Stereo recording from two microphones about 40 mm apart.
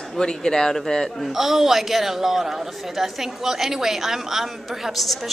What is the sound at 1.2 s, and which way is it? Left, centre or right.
A man's voice, centre.